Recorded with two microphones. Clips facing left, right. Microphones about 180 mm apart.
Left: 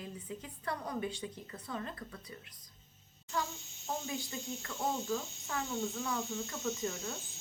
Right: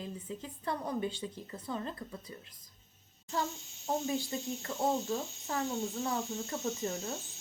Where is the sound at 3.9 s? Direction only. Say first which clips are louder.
Right 6 dB; 35° right (ahead or behind).